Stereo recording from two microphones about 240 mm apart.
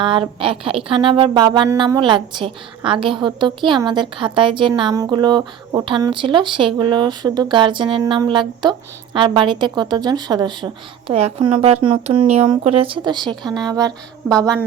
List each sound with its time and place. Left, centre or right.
0.0 s a woman's voice: right